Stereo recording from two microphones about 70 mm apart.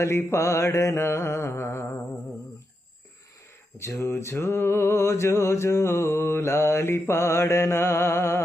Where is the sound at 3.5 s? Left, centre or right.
Left.